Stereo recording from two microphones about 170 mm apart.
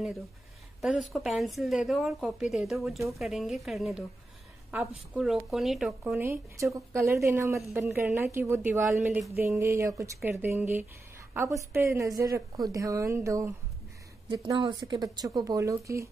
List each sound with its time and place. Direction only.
0.7 s a woman's voice: centre (ahead or behind)
6.2 s a woman's voice: 15° right (ahead or behind)